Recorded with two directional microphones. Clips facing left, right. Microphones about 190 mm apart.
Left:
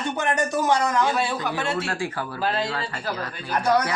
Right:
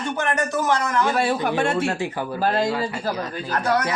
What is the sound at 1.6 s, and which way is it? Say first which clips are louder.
Music: right 3 dB; 50° right (ahead or behind).